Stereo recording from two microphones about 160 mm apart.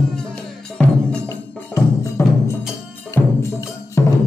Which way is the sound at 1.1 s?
10° left (ahead or behind).